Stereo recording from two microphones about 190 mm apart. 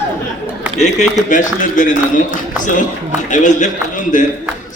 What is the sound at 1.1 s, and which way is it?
A man's voice, 40° left (ahead or behind).